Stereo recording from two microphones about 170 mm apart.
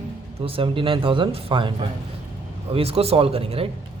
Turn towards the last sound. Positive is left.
turn(degrees=-35)  # may be behind; listen again after turning